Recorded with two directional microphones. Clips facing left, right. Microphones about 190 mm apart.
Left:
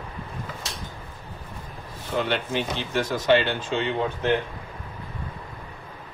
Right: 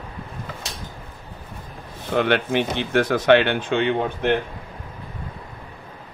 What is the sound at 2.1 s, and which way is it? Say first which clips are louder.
Speech: right 6 dB; 65° right (ahead or behind).